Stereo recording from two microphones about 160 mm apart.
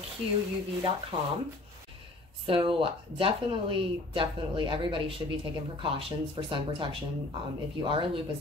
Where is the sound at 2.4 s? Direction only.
35° right (ahead or behind).